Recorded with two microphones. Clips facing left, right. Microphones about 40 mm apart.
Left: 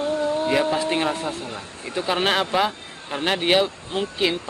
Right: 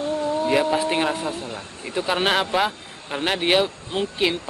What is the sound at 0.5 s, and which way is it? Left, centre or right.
Speech, centre.